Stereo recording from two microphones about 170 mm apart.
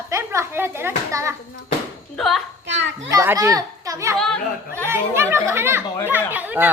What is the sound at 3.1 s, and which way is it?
A child's voice, 15° right (ahead or behind).